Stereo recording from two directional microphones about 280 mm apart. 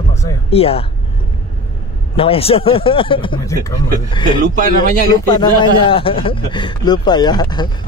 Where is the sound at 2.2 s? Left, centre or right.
Left.